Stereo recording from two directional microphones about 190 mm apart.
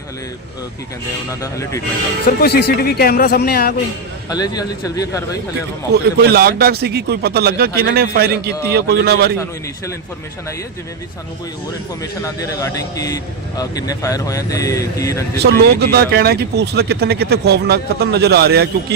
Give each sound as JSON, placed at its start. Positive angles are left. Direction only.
{"t": 1.4, "sound": "a man's voice", "side_deg": 15}
{"t": 2.4, "sound": "speech", "side_deg": 55}
{"t": 4.3, "sound": "a man's voice", "side_deg": 20}
{"t": 5.9, "sound": "speech", "side_deg": -55}
{"t": 12.2, "sound": "a man's voice", "side_deg": 15}
{"t": 15.4, "sound": "speech", "side_deg": -55}